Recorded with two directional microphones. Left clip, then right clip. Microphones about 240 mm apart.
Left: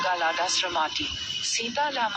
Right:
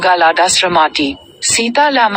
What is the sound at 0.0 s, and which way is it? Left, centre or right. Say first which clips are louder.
Speech: right 15 dB; right.